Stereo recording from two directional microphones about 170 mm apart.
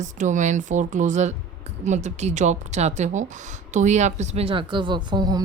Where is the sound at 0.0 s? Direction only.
45° right (ahead or behind).